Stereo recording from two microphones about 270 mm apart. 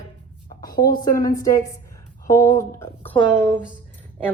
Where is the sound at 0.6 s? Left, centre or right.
Centre.